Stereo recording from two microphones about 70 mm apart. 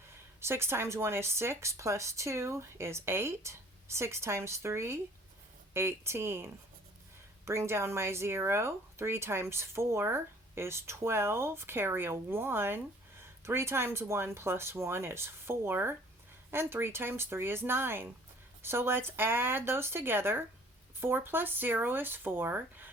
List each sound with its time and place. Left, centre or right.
0.1 s speech: right